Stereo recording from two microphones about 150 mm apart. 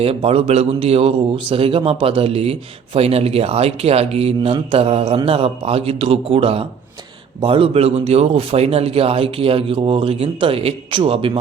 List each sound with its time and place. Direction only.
0.0 s a man's voice: 40° right (ahead or behind)